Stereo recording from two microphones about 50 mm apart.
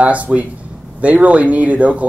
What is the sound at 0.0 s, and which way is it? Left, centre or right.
Speech, right.